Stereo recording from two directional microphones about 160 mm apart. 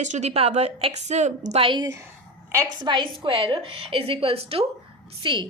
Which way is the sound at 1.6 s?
25° right (ahead or behind).